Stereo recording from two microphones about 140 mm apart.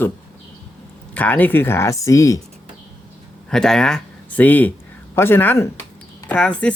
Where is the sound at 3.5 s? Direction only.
5° left (ahead or behind).